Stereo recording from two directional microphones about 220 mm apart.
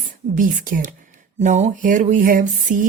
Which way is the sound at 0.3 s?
40° right (ahead or behind).